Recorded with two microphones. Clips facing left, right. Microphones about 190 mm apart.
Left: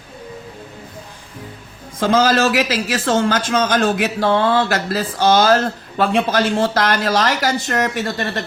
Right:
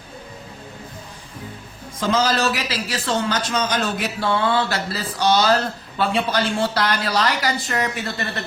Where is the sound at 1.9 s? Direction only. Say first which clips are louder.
Left 5 dB; 55° left (ahead or behind).